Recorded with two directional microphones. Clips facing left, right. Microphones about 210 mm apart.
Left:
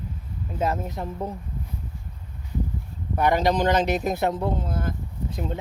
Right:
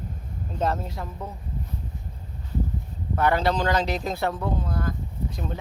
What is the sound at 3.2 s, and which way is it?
Speech, 15° left (ahead or behind).